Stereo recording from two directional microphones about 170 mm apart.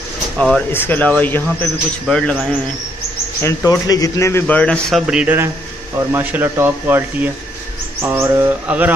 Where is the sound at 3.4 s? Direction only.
20° left (ahead or behind).